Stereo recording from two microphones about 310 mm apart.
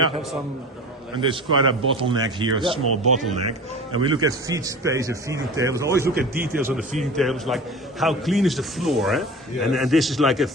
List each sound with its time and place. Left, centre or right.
1.2 s a man's voice: centre